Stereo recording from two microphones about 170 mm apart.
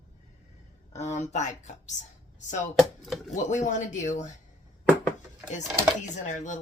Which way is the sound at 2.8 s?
Centre (ahead or behind).